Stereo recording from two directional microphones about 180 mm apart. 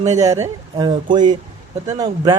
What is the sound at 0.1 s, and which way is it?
Speech, 20° right (ahead or behind).